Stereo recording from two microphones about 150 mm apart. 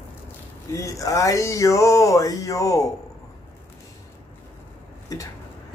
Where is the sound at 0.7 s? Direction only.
20° left (ahead or behind).